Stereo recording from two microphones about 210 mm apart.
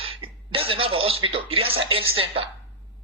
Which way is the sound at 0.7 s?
25° right (ahead or behind).